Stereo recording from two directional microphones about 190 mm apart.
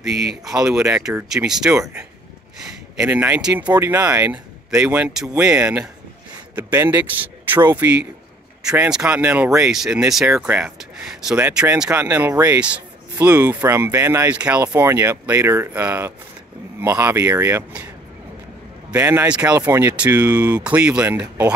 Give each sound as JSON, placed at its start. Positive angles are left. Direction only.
{"t": 0.1, "sound": "speech", "side_deg": -60}
{"t": 0.5, "sound": "speech", "side_deg": -5}
{"t": 3.0, "sound": "speech", "side_deg": -5}